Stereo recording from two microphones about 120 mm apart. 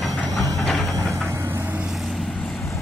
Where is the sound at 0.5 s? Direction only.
Centre (ahead or behind).